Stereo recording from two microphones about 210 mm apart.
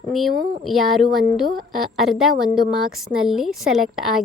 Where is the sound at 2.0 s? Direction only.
Centre (ahead or behind).